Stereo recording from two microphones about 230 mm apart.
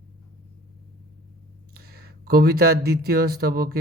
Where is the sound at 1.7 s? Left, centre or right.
Right.